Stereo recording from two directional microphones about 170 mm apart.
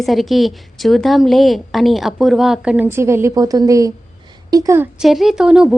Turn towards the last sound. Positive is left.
turn(degrees=-5)  # may be behind; listen again after turning